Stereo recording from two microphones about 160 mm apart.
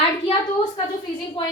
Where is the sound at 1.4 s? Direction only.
30° left (ahead or behind).